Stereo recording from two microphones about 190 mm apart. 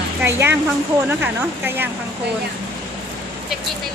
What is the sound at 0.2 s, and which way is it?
Speech, 15° right (ahead or behind).